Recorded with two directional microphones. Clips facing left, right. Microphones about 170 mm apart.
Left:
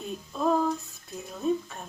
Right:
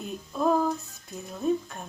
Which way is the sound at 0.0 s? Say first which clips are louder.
Right 1 dB; 5° right (ahead or behind).